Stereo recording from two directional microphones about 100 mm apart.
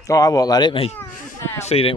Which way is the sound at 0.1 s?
40° left (ahead or behind).